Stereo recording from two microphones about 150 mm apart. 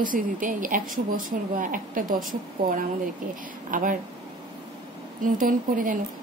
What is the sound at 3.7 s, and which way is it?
Speech, 60° right (ahead or behind).